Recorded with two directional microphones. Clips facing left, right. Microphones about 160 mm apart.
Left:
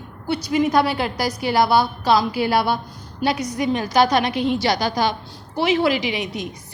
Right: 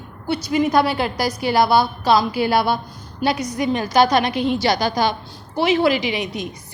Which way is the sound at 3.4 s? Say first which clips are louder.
Right 1 dB; 45° right (ahead or behind).